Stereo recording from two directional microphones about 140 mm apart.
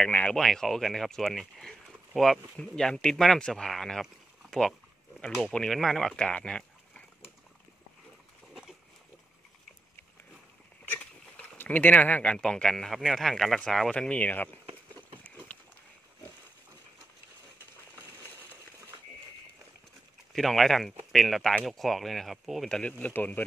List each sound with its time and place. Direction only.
0.0 s speech: 10° left (ahead or behind)
10.9 s speech: 10° left (ahead or behind)
14.7 s a sound: 35° right (ahead or behind)
15.2 s run: 10° left (ahead or behind)
20.3 s speech: centre (ahead or behind)